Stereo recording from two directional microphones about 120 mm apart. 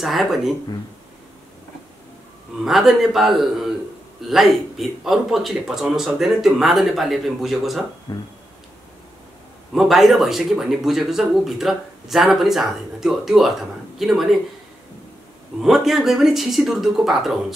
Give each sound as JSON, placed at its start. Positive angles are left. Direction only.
{"t": 0.0, "sound": "speech", "side_deg": 0}
{"t": 2.6, "sound": "speech", "side_deg": 0}
{"t": 8.1, "sound": "speech", "side_deg": 35}
{"t": 9.8, "sound": "speech", "side_deg": 0}
{"t": 15.6, "sound": "speech", "side_deg": 0}